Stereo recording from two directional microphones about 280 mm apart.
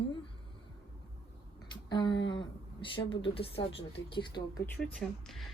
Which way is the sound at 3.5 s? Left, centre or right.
Left.